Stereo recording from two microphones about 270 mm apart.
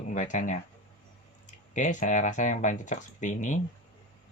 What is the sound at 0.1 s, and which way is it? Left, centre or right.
Speech, left.